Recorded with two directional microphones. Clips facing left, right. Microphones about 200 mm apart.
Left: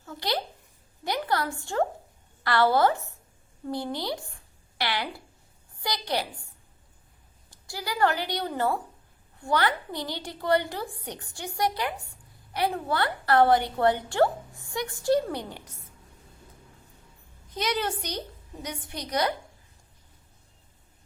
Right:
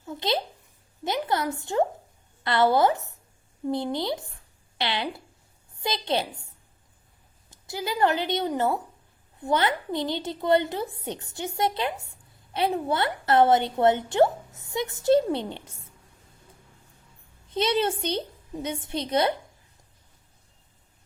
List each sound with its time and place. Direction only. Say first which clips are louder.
0.0 s a sound: right 3 dB; 20° right (ahead or behind)
2.4 s a woman's voice: right 1 dB; 20° right (ahead or behind)
7.5 s a woman's voice: right 4 dB; 20° right (ahead or behind)
17.5 s a woman's voice: right 5 dB; 25° right (ahead or behind)